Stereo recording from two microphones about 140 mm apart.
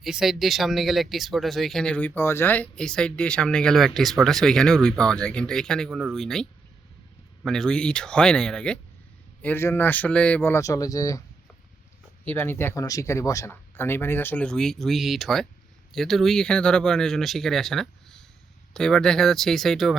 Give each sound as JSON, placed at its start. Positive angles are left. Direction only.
{"t": 0.0, "sound": "speech", "side_deg": -5}
{"t": 12.2, "sound": "speech", "side_deg": 15}